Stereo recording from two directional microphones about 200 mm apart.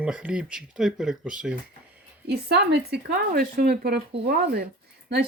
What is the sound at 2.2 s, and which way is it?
Speech, 55° right (ahead or behind).